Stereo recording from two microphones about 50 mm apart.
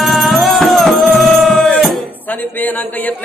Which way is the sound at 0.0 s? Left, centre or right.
Centre.